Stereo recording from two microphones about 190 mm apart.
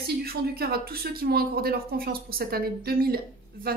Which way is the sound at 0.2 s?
55° right (ahead or behind).